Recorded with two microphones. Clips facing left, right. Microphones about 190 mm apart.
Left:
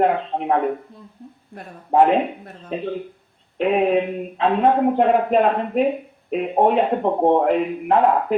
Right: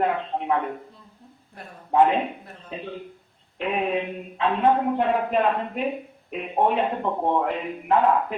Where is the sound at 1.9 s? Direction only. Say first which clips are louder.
Left 4 dB; 30° left (ahead or behind).